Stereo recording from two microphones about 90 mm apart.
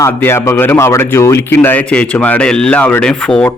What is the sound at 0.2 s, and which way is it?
Speech, 30° left (ahead or behind).